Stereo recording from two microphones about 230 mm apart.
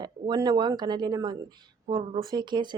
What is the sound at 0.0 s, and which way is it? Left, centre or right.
Speech, centre.